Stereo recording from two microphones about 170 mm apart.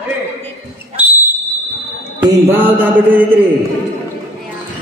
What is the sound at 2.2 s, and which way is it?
Mantra, 10° right (ahead or behind).